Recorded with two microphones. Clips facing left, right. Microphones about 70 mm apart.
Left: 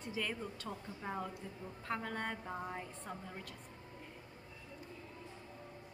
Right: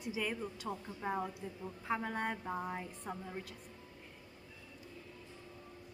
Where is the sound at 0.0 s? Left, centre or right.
Centre.